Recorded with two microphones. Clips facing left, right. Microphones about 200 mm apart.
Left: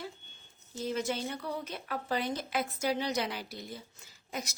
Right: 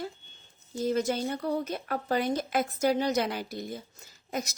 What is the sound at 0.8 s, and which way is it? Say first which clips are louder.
Speech: right 6 dB; 40° right (ahead or behind).